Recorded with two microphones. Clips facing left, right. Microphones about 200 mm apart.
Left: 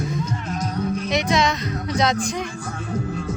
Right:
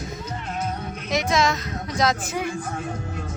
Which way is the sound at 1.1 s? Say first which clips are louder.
Right 1 dB; centre (ahead or behind).